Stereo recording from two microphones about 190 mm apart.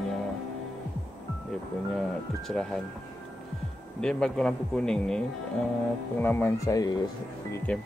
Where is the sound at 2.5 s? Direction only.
5° left (ahead or behind).